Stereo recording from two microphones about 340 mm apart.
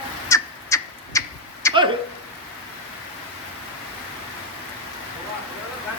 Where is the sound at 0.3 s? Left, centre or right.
Centre.